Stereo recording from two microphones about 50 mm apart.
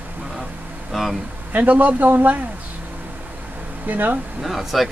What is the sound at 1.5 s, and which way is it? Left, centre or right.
Speech, right.